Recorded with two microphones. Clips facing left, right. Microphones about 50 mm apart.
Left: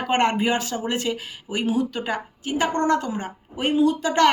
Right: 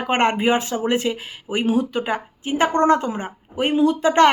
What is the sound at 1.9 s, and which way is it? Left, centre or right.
Speech, right.